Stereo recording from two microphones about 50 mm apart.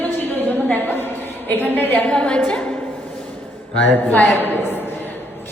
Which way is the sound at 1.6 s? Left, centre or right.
Left.